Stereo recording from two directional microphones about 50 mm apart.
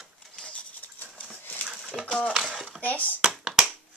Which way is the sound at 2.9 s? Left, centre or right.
Left.